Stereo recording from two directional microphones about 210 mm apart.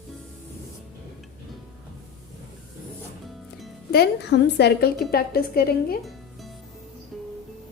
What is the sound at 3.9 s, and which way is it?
A woman's voice, 50° left (ahead or behind).